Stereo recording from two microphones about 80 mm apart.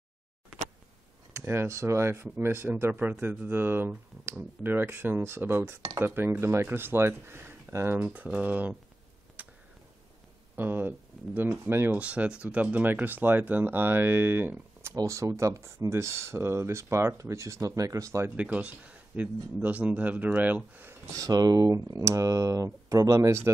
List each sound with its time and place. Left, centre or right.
1.3 s speech: right
2.9 s speech: right
9.4 s a sound: right
10.5 s speech: right
12.0 s speech: centre
15.0 s speech: right
18.3 s speech: centre
21.1 s speech: right